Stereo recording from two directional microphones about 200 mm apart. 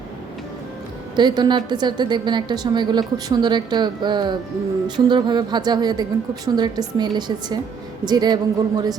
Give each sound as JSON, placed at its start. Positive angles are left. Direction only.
{"t": 1.1, "sound": "a woman's voice", "side_deg": -20}